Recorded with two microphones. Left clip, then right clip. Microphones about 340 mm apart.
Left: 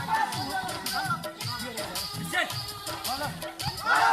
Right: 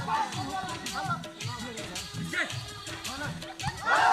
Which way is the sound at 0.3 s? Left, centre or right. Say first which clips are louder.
Left 3 dB; centre.